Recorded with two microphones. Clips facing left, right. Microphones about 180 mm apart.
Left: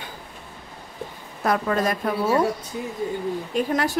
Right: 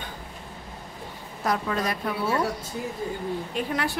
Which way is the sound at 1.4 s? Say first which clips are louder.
Left 4 dB; 55° left (ahead or behind).